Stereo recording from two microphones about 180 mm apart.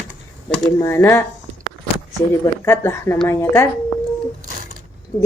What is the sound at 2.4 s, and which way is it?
Speech, 15° left (ahead or behind).